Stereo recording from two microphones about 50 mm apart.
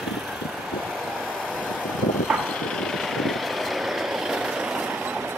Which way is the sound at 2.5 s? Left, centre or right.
Centre.